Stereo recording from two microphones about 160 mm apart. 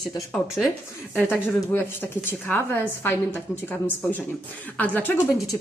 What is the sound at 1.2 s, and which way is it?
A woman's voice, 15° left (ahead or behind).